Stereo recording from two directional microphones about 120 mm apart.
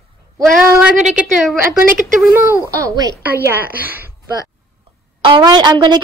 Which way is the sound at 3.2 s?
15° right (ahead or behind).